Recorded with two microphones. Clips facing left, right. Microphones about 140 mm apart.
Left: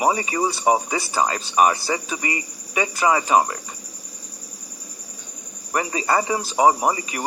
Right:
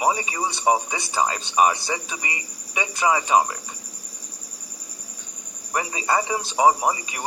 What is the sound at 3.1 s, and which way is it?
Speech, 35° left (ahead or behind).